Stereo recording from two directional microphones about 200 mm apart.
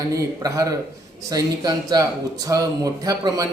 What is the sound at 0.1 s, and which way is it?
A man's voice, 15° right (ahead or behind).